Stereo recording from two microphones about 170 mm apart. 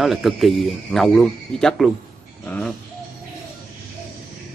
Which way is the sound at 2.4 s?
10° left (ahead or behind).